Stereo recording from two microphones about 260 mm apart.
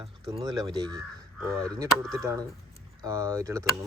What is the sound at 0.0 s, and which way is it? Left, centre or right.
Speech, centre.